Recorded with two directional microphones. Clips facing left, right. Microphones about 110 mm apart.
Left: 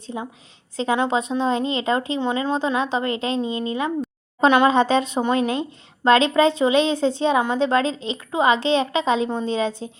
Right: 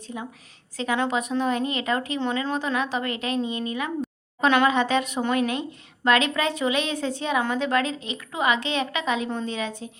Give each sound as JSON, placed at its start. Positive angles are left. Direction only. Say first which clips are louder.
{"t": 0.1, "sound": "a woman's voice", "louder": "left 3 dB", "side_deg": 30}